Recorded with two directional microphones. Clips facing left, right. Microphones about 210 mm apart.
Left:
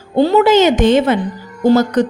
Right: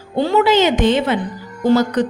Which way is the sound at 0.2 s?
35° left (ahead or behind).